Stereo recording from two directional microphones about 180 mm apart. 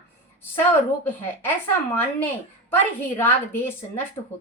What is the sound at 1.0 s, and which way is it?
A woman's voice, 10° left (ahead or behind).